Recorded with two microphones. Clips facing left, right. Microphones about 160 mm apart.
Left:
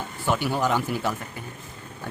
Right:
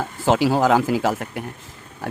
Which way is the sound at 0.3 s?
90° right.